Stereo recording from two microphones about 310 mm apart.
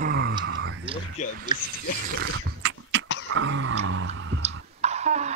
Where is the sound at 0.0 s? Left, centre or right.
Right.